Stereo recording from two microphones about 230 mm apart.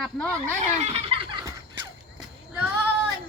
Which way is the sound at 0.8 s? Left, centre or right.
Right.